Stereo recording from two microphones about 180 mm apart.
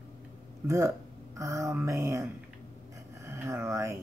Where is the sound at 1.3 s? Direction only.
15° right (ahead or behind).